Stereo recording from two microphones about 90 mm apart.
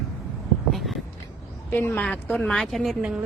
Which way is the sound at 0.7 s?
Centre (ahead or behind).